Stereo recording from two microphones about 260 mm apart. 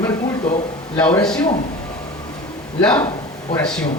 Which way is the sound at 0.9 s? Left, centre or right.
Centre.